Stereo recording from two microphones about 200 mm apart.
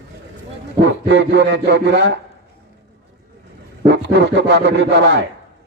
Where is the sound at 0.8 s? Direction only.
65° right (ahead or behind).